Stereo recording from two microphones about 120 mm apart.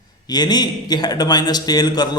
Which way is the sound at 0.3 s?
35° left (ahead or behind).